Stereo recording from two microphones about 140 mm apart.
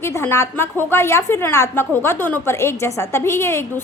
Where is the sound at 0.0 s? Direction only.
20° left (ahead or behind).